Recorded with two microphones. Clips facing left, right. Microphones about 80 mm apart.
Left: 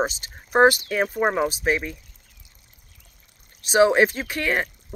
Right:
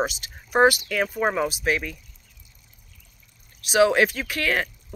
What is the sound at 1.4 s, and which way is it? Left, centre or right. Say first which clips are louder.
Speech: left 2 dB; left.